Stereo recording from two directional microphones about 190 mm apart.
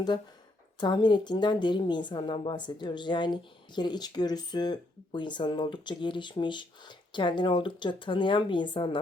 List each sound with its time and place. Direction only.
0.8 s speech: 25° left (ahead or behind)